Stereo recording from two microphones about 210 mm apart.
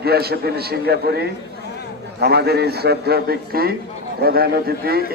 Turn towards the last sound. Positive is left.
turn(degrees=-45)  # may be behind; listen again after turning